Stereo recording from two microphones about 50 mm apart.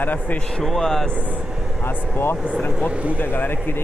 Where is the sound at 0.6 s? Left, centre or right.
Centre.